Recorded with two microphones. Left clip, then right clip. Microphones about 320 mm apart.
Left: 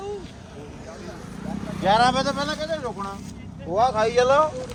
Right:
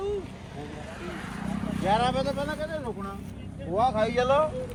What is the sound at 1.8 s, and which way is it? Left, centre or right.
Speech, left.